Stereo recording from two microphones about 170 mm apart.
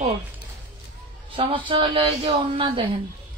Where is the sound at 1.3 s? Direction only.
30° right (ahead or behind).